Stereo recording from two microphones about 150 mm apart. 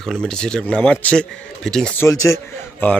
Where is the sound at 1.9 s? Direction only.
20° left (ahead or behind).